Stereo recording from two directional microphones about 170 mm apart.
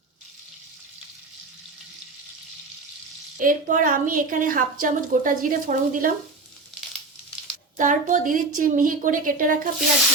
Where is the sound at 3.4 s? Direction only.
50° right (ahead or behind).